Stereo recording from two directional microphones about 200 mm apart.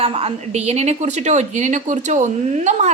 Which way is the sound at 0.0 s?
30° right (ahead or behind).